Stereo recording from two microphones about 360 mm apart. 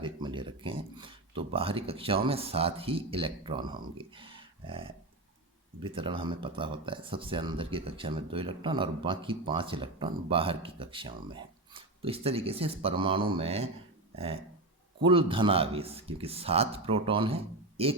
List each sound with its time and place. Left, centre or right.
0.0 s speech: centre
15.0 s speech: centre